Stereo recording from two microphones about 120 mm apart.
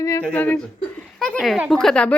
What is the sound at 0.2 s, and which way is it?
A woman's voice, 10° left (ahead or behind).